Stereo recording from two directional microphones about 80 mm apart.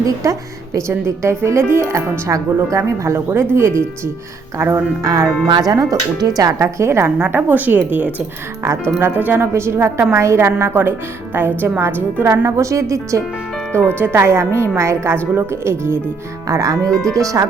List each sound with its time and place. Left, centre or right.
0.0 s a woman's voice: right
5.0 s speech: right
5.5 s speech: right
7.2 s a woman's voice: right
9.5 s a woman's voice: right
12.5 s speech: right
16.5 s speech: right